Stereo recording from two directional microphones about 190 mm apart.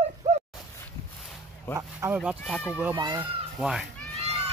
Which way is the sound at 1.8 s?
15° right (ahead or behind).